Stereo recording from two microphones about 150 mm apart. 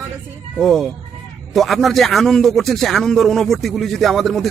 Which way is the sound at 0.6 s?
Centre (ahead or behind).